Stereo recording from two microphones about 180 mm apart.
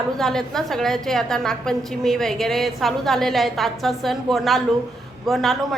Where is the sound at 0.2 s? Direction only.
Centre (ahead or behind).